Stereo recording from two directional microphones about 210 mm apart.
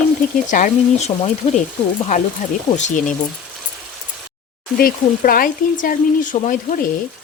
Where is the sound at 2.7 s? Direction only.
35° left (ahead or behind).